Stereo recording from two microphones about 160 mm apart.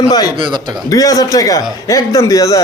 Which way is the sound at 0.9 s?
20° left (ahead or behind).